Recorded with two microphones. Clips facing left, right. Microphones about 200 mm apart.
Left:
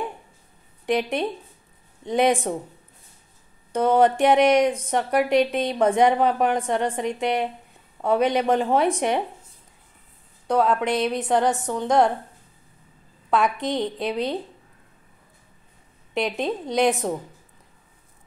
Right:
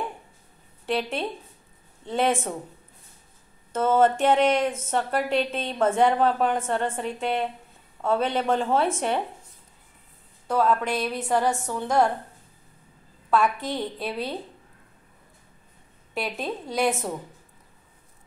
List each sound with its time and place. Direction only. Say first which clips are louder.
0.8 s a woman's voice: left 4 dB; 15° left (ahead or behind)
3.7 s a woman's voice: left 2 dB; 15° left (ahead or behind)
10.4 s speech: left 2 dB; 20° left (ahead or behind)
13.3 s speech: left 1 dB; 20° left (ahead or behind)
16.2 s speech: left 5 dB; 20° left (ahead or behind)